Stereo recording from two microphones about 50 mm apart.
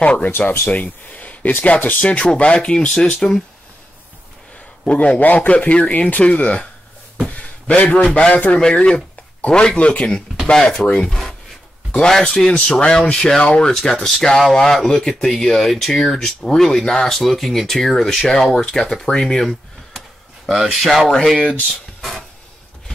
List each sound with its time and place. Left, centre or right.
0.0 s speech: left
0.4 s speech: left; by 3.4 s centre
5.2 s speech: left
8.5 s speech: centre
10.4 s speech: centre
11.9 s speech: centre
20.4 s speech: centre